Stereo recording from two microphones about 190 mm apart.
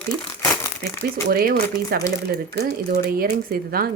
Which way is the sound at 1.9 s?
20° left (ahead or behind).